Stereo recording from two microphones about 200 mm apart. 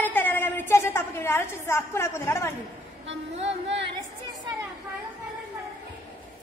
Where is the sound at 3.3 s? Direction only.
30° right (ahead or behind).